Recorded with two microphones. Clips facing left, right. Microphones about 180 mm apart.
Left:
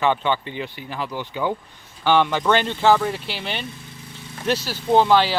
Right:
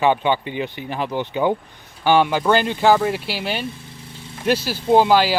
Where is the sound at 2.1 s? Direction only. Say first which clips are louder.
Right 2 dB; 10° right (ahead or behind).